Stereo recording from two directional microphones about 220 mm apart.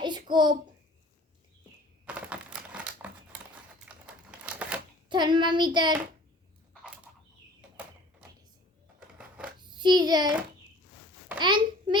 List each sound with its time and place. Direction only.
0.0 s a sound: 20° right (ahead or behind)
2.0 s crumpling: 5° right (ahead or behind)
5.0 s a child's voice: 20° right (ahead or behind)
9.0 s a sound: 5° right (ahead or behind)
9.6 s a child's voice: 20° right (ahead or behind)
11.3 s a child's voice: 20° right (ahead or behind)